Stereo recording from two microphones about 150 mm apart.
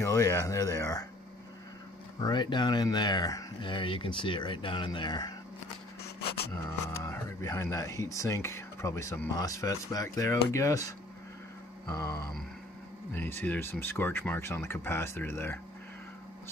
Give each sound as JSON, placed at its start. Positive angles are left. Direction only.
{"t": 0.0, "sound": "speech", "side_deg": 20}
{"t": 2.1, "sound": "speech", "side_deg": 30}
{"t": 7.0, "sound": "speech", "side_deg": 20}